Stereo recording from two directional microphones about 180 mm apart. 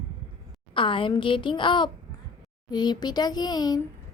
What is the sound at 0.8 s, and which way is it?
A woman's voice, 30° left (ahead or behind).